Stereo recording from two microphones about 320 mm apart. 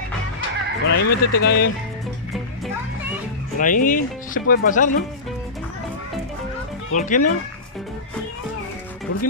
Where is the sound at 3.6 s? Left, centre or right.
Left.